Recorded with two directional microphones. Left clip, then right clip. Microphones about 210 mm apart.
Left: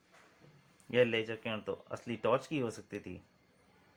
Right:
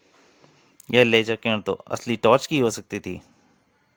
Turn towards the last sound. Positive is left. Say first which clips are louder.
# right 13 dB
turn(degrees=-55)  # may be behind; listen again after turning